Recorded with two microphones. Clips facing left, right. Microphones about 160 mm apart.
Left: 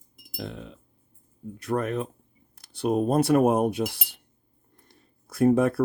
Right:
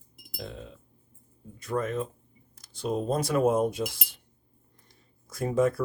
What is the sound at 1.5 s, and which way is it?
Speech, 65° left (ahead or behind).